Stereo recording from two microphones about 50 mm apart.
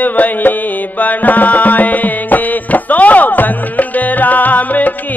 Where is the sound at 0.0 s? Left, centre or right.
Left.